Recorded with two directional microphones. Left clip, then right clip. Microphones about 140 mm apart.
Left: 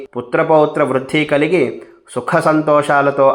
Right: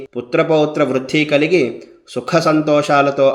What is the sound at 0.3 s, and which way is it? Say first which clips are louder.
Speech: left 2 dB; 35° right (ahead or behind).